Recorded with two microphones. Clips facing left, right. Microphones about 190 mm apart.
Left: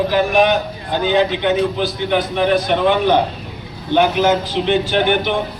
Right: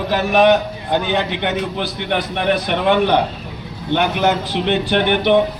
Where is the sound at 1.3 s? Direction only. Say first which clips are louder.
Left 4 dB; 65° right (ahead or behind).